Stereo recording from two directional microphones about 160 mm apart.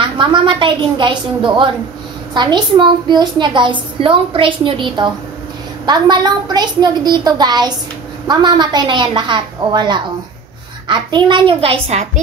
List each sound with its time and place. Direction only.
0.0 s a woman's voice: 30° right (ahead or behind)